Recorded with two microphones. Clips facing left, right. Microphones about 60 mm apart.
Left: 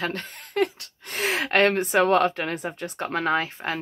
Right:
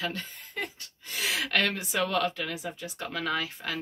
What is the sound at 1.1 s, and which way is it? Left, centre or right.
Speech, left.